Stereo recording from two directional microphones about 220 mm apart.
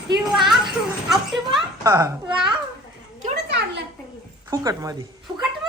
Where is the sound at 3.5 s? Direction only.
50° right (ahead or behind).